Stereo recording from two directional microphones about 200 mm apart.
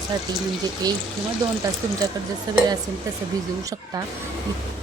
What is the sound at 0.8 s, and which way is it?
Speech, 20° right (ahead or behind).